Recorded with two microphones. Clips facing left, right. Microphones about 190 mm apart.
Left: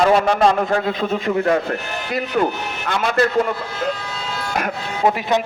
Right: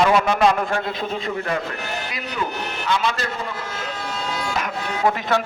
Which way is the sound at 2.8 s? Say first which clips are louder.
Left 5 dB; 50° left (ahead or behind).